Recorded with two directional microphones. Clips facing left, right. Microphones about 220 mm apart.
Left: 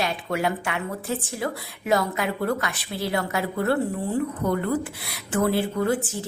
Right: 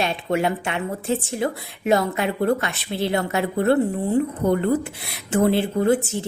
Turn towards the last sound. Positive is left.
turn(degrees=-25)  # may be behind; listen again after turning